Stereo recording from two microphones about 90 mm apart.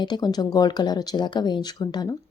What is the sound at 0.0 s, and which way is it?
Speech, 50° left (ahead or behind).